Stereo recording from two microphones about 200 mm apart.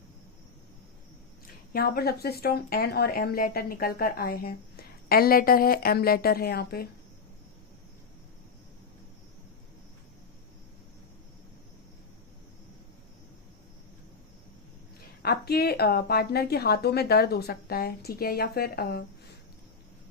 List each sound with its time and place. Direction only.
1.7 s speech: 50° left (ahead or behind)
15.2 s speech: 50° left (ahead or behind)